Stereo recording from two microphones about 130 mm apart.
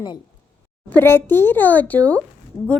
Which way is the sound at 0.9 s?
15° left (ahead or behind).